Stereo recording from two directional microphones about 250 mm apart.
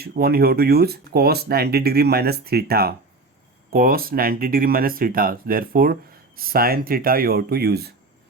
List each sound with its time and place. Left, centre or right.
0.0 s speech: right